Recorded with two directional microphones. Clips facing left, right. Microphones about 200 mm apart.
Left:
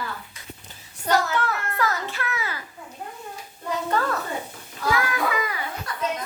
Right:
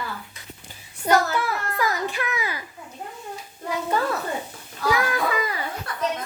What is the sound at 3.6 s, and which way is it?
Speech, 10° right (ahead or behind).